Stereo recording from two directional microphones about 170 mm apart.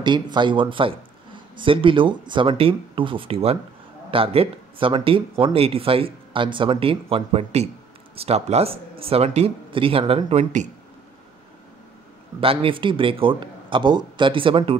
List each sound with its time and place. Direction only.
0.0 s speech: 25° right (ahead or behind); by 10.7 s 40° right (ahead or behind)
12.4 s speech: 30° right (ahead or behind)